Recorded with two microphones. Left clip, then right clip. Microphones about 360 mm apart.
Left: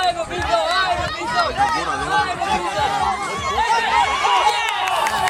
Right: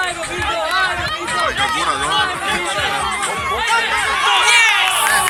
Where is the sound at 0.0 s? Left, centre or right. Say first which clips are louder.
Even; left.